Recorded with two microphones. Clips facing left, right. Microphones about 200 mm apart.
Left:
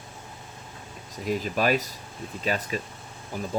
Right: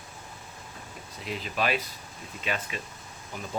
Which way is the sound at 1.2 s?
45° left (ahead or behind).